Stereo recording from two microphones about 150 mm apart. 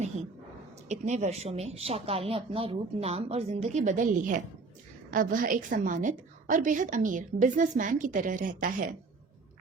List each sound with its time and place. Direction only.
0.9 s a woman's voice: 50° right (ahead or behind)